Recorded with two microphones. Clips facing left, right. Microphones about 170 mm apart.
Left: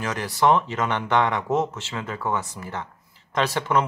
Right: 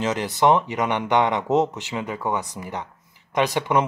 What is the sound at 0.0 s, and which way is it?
Speech, 20° right (ahead or behind).